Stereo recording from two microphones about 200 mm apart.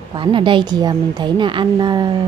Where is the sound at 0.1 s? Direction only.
25° right (ahead or behind).